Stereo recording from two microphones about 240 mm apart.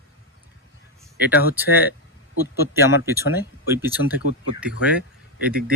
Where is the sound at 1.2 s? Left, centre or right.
Centre.